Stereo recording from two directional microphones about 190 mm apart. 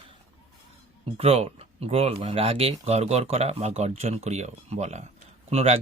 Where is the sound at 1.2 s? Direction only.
30° right (ahead or behind).